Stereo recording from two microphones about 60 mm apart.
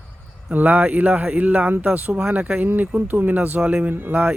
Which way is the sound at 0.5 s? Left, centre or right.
Right.